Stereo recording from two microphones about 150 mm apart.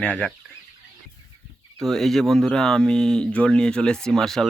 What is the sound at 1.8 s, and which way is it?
Speech, centre (ahead or behind).